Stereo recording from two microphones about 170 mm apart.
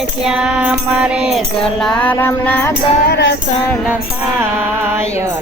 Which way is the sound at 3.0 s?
70° left (ahead or behind).